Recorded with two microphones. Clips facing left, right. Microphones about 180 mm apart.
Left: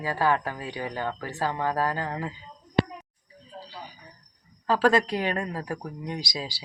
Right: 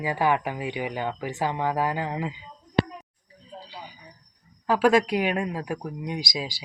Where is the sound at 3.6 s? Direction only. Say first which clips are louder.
Left 1 dB; 15° right (ahead or behind).